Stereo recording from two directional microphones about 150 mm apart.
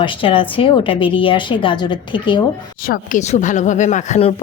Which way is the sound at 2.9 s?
55° left (ahead or behind).